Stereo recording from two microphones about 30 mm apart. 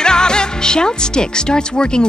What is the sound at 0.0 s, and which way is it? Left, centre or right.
Speech, left.